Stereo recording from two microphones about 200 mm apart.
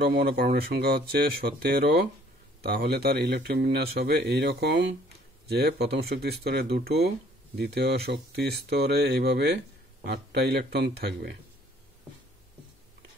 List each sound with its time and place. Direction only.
0.0 s speech: 50° right (ahead or behind)